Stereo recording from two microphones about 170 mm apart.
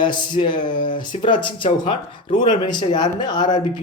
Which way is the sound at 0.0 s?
25° left (ahead or behind).